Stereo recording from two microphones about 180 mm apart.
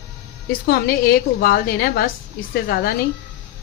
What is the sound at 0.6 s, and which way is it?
A woman's voice, 55° left (ahead or behind).